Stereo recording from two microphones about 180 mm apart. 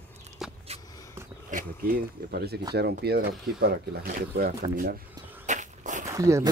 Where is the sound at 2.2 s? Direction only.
60° right (ahead or behind).